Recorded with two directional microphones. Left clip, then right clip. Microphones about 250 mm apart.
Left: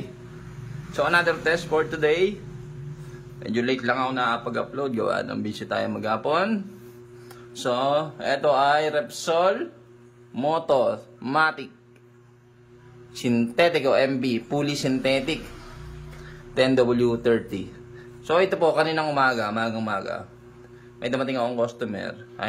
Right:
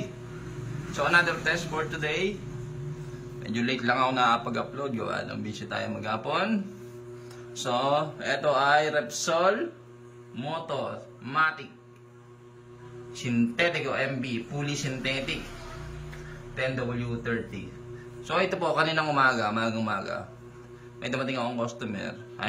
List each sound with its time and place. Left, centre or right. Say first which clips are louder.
0.9 s a man's voice: left 2 dB; centre
3.4 s a man's voice: left 3 dB; centre
13.1 s speech: left 5 dB; centre
16.5 s a man's voice: left 11 dB; left